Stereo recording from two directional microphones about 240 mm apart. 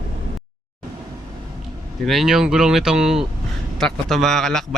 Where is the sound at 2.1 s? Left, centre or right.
Centre.